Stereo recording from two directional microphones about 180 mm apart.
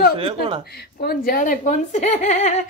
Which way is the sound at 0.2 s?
30° right (ahead or behind).